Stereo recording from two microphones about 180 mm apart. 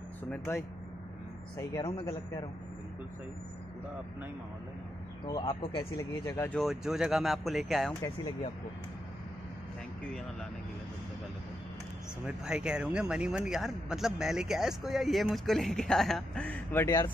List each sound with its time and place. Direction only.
0.3 s speech: 15° left (ahead or behind)
5.2 s speech: 30° left (ahead or behind)
6.6 s a man's voice: centre (ahead or behind)
12.3 s a man's voice: 5° right (ahead or behind); by 17.0 s 10° left (ahead or behind)